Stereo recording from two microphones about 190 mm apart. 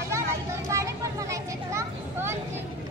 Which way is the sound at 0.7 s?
15° right (ahead or behind).